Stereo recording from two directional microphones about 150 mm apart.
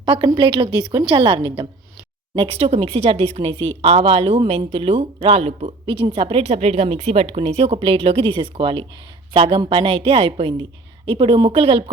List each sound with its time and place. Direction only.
0.0 s speech: 30° right (ahead or behind)